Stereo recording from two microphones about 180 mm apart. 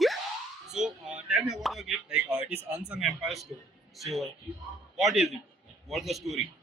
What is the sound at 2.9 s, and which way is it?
A man's voice, 5° right (ahead or behind).